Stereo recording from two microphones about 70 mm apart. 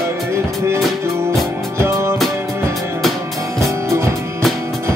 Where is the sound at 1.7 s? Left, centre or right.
Right.